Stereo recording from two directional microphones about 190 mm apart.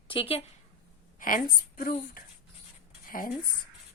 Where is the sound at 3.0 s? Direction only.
50° left (ahead or behind).